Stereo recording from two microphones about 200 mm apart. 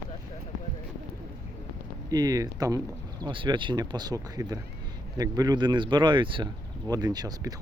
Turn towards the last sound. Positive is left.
turn(degrees=-20)  # may be behind; listen again after turning